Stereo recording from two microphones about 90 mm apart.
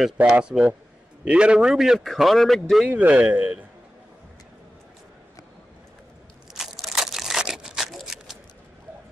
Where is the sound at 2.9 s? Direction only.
15° right (ahead or behind).